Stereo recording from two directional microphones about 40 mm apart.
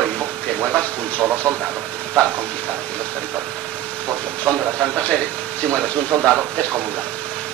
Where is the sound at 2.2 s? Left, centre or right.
Left.